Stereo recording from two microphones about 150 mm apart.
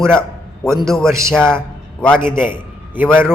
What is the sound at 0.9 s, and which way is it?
A man's voice, 5° left (ahead or behind).